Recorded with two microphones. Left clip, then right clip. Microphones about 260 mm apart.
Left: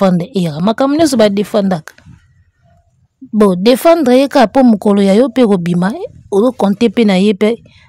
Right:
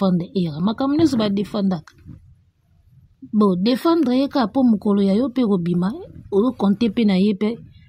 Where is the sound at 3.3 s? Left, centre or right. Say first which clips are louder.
Left 10 dB; left.